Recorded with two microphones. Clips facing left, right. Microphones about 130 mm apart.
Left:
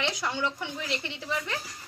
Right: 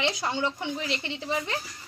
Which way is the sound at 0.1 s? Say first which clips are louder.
Right 2 dB; 25° right (ahead or behind).